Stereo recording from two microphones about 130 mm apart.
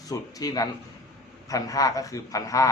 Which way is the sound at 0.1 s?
30° left (ahead or behind).